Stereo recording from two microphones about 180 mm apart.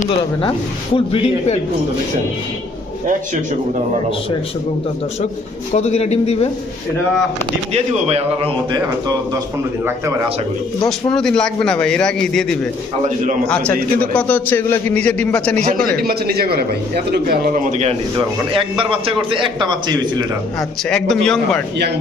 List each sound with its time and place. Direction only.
0.9 s speech: 30° left (ahead or behind)
5.7 s speech: 40° left (ahead or behind)
7.7 s a man's voice: 35° right (ahead or behind)
8.7 s a man's voice: 20° right (ahead or behind)
11.1 s a man's voice: 5° left (ahead or behind)
14.0 s a man's voice: 10° left (ahead or behind)
16.0 s a man's voice: 60° right (ahead or behind); by 17.9 s 40° right (ahead or behind)
18.8 s a man's voice: 30° right (ahead or behind)
21.2 s a man's voice: 5° left (ahead or behind)